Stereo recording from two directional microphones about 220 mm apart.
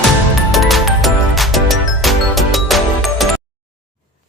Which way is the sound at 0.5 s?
Centre (ahead or behind).